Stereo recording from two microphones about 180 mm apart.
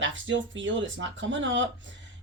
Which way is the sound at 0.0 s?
90° right.